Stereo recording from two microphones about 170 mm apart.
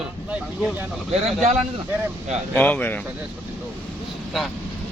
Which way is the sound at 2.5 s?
10° left (ahead or behind).